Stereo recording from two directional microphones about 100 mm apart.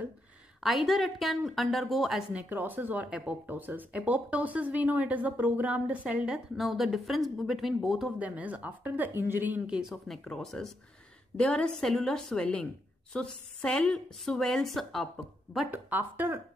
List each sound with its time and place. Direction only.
0.6 s speech: centre (ahead or behind)
2.3 s speech: 20° right (ahead or behind); by 8.1 s 5° right (ahead or behind)
8.2 s speech: 15° right (ahead or behind)
10.0 s a woman's voice: centre (ahead or behind)
15.7 s speech: 20° right (ahead or behind)